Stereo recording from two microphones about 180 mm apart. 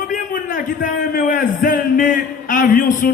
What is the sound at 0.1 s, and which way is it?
A man's voice, 45° left (ahead or behind).